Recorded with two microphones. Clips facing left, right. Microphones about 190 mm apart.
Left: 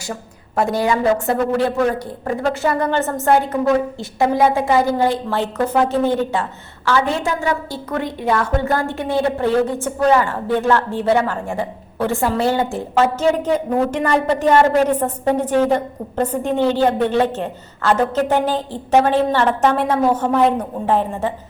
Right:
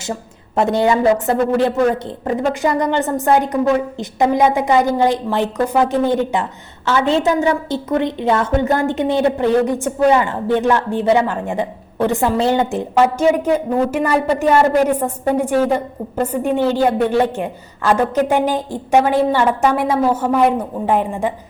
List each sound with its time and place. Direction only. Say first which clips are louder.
0.1 s a woman's voice: right 4 dB; 25° right (ahead or behind)